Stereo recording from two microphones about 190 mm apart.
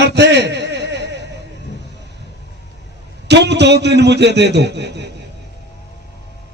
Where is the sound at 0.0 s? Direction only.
65° right (ahead or behind).